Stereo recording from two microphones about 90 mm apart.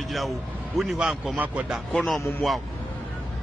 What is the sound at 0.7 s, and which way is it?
Speech, 5° right (ahead or behind).